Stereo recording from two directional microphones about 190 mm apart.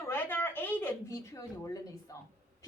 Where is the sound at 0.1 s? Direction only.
10° left (ahead or behind).